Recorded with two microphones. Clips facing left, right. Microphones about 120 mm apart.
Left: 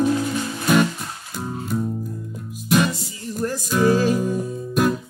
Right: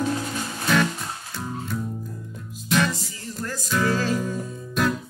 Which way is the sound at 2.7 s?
15° left (ahead or behind).